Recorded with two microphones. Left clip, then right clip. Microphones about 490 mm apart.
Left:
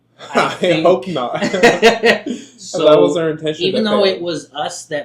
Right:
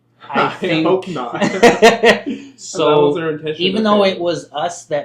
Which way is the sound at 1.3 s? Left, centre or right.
Right.